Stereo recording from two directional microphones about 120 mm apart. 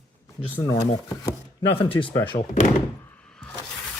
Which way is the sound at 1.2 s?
40° left (ahead or behind).